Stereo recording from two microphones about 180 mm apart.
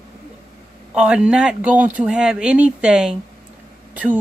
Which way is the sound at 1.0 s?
5° right (ahead or behind).